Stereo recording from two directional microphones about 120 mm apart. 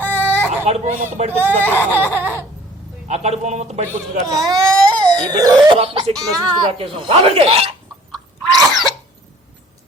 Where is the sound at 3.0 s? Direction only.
70° right (ahead or behind).